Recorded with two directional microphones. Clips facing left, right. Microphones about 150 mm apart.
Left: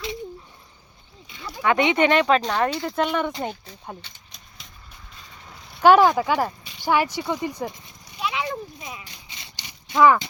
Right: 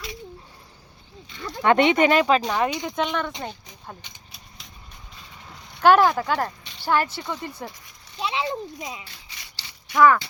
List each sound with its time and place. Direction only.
1.5 s speech: 20° left (ahead or behind)
2.0 s speech: 10° right (ahead or behind)
2.9 s speech: 10° left (ahead or behind)
4.0 s a sound: 5° right (ahead or behind)
5.8 s speech: 10° left (ahead or behind)
8.2 s a child's voice: 30° right (ahead or behind)
9.0 s a sound: 20° left (ahead or behind)